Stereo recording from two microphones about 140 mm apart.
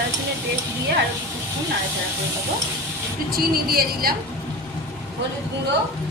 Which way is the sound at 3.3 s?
90° right.